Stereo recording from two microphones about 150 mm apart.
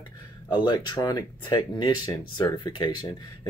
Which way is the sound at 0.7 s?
30° left (ahead or behind).